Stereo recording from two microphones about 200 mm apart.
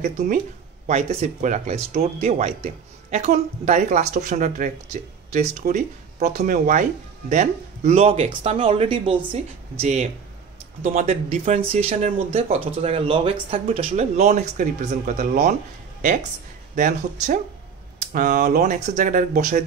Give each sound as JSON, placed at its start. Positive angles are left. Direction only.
{"t": 0.0, "sound": "speech", "side_deg": -40}